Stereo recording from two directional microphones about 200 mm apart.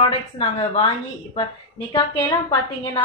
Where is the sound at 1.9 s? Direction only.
20° left (ahead or behind).